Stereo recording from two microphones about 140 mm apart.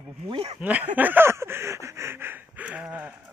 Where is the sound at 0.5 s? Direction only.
10° right (ahead or behind).